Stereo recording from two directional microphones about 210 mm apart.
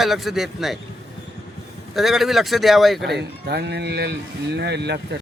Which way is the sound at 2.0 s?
Centre (ahead or behind).